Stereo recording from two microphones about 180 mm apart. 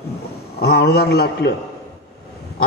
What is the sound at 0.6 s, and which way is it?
Speech, 65° left (ahead or behind).